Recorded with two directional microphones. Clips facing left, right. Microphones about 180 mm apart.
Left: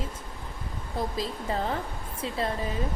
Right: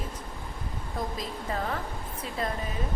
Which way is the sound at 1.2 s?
30° left (ahead or behind).